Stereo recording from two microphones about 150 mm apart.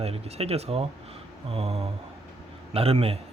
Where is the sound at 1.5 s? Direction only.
40° right (ahead or behind).